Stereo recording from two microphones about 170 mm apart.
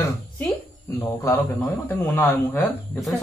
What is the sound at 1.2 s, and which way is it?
A man's voice, 15° left (ahead or behind).